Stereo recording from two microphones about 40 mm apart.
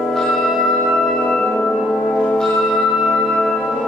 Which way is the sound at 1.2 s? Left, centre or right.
Left.